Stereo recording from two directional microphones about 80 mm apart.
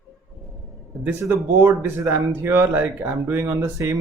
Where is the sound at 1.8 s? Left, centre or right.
Right.